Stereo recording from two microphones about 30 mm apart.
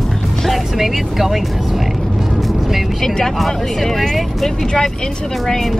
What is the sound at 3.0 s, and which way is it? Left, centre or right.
Speech, centre.